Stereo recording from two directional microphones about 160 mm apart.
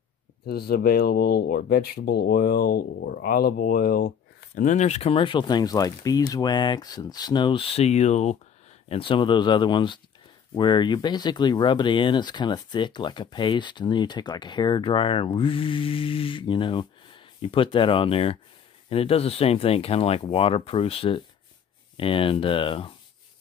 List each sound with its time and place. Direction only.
0.5 s speech: 75° left (ahead or behind); by 22.9 s 35° left (ahead or behind)